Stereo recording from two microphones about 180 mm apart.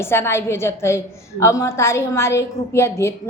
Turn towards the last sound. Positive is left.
turn(degrees=15)  # may be behind; listen again after turning